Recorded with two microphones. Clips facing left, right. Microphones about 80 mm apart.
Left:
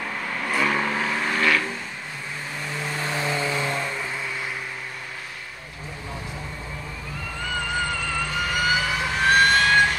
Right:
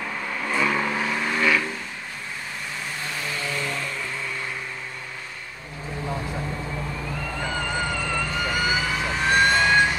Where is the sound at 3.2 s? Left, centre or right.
Left.